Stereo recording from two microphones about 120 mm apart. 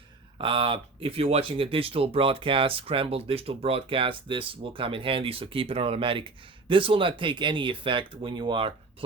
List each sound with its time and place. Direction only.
0.3 s speech: 45° right (ahead or behind)